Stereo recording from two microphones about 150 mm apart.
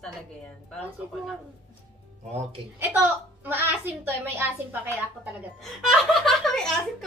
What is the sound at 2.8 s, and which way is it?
A woman's voice, 10° right (ahead or behind).